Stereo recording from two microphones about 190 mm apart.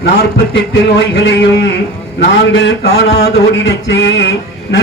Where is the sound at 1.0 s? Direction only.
65° left (ahead or behind).